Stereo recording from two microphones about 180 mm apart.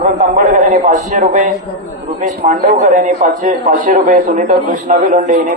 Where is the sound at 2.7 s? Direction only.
40° right (ahead or behind).